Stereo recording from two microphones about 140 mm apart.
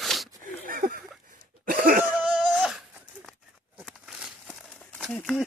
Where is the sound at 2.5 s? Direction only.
5° right (ahead or behind).